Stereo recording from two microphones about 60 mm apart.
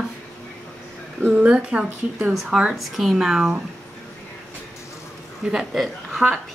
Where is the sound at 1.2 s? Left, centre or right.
Right.